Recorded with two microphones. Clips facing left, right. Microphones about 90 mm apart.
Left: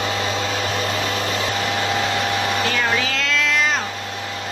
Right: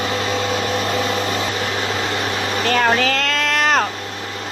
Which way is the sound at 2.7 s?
50° right (ahead or behind).